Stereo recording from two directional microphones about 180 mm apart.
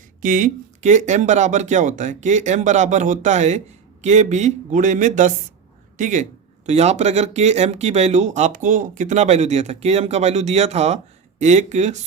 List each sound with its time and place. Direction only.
0.2 s speech: 45° right (ahead or behind)